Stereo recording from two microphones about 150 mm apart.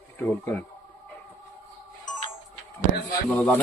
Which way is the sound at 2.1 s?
55° left (ahead or behind).